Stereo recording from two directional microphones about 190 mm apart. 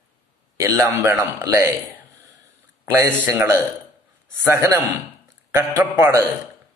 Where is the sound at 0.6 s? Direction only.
15° right (ahead or behind).